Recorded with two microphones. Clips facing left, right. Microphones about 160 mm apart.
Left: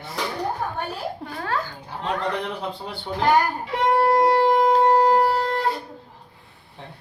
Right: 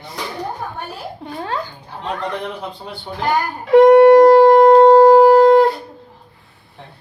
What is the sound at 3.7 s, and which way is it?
Shofar, 65° right (ahead or behind).